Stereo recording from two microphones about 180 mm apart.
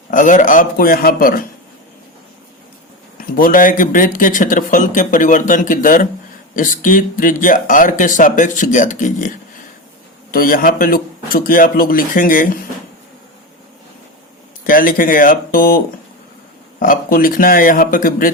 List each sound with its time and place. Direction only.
0.1 s speech: 45° left (ahead or behind)
3.2 s speech: 50° left (ahead or behind)
10.3 s speech: 55° left (ahead or behind)
14.7 s speech: 50° left (ahead or behind)
16.8 s speech: 50° left (ahead or behind)